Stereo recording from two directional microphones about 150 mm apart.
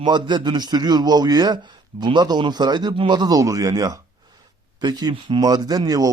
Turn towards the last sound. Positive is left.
turn(degrees=-25)  # may be behind; listen again after turning